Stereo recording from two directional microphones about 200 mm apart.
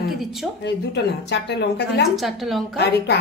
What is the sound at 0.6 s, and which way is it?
Speech, 60° left (ahead or behind).